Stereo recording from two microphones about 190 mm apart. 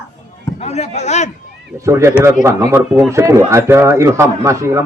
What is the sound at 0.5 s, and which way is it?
Speech, 35° left (ahead or behind).